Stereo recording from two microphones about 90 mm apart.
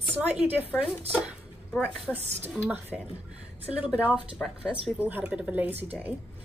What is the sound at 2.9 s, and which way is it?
Speech, 5° right (ahead or behind).